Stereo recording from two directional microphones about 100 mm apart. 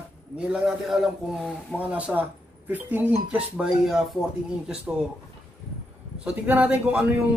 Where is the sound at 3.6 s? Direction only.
5° right (ahead or behind).